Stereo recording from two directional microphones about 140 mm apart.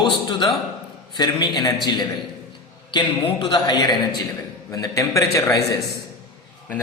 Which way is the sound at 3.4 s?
35° left (ahead or behind).